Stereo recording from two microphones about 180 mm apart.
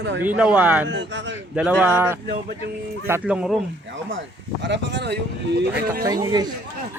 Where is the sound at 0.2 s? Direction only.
10° right (ahead or behind).